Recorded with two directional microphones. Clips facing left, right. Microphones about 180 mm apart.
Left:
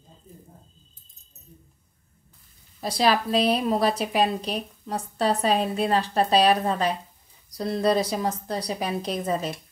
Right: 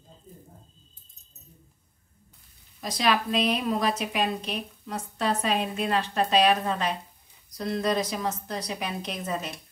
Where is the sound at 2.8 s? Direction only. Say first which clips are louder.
Left 3 dB; 35° left (ahead or behind).